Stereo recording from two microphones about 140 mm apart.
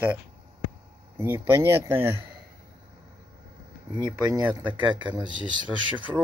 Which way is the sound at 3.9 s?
30° right (ahead or behind).